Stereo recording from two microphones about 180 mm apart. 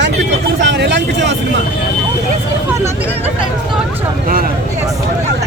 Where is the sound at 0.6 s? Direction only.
75° right (ahead or behind).